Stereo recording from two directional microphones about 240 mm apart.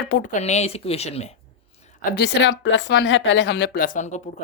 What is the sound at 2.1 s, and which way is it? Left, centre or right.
Speech, left.